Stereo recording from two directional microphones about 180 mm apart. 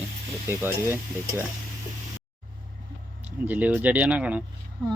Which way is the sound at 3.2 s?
10° right (ahead or behind).